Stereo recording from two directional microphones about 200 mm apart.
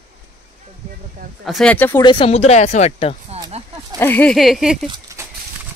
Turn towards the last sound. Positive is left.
turn(degrees=-20)  # may be behind; listen again after turning